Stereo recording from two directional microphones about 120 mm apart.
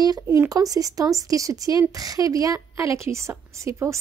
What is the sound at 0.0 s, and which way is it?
Speech, 35° right (ahead or behind).